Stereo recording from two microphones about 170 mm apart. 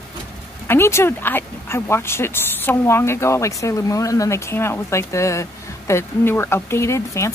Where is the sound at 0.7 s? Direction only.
15° left (ahead or behind).